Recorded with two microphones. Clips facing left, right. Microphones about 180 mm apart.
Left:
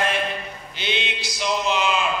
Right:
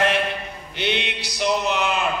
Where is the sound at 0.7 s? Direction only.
65° right (ahead or behind).